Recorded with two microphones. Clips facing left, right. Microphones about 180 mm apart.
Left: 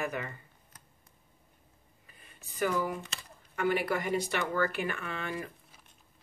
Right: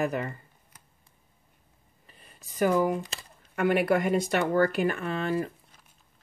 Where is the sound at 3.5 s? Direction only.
60° right (ahead or behind).